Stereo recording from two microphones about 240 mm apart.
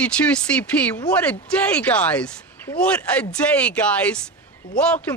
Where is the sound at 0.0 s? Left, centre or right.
Centre.